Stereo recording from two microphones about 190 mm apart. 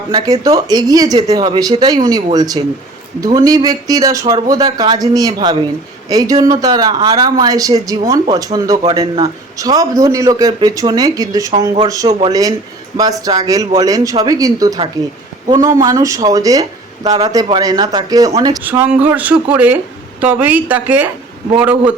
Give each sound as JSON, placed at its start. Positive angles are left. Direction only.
{"t": 0.1, "sound": "a woman's voice", "side_deg": -20}